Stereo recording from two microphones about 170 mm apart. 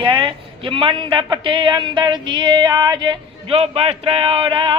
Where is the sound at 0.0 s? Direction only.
30° right (ahead or behind).